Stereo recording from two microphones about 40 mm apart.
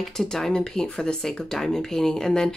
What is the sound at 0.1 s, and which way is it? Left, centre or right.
Speech, centre.